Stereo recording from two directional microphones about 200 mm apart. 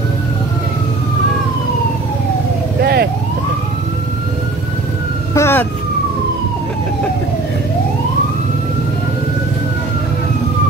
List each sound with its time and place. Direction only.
2.8 s vehicle: 55° right (ahead or behind)
5.3 s emergency vehicle: 10° left (ahead or behind)